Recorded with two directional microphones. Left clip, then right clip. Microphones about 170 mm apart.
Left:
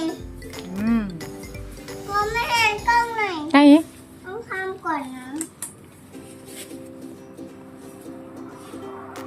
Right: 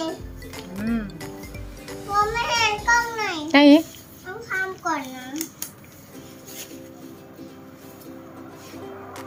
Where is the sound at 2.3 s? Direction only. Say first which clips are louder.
Left 2 dB; 75° left (ahead or behind).